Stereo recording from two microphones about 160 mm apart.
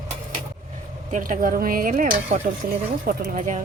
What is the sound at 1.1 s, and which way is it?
Speech, 60° right (ahead or behind).